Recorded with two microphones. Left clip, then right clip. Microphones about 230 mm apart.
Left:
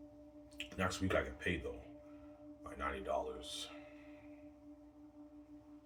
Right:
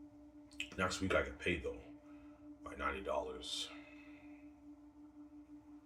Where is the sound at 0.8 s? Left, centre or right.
Centre.